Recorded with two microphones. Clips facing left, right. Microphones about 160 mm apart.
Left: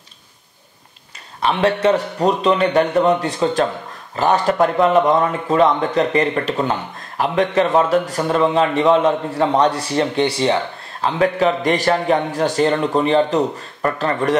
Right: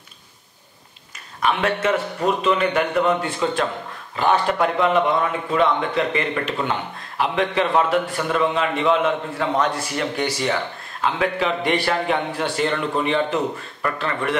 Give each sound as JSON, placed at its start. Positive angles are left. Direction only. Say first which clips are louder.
{"t": 1.4, "sound": "a man's voice", "louder": "left 4 dB", "side_deg": 30}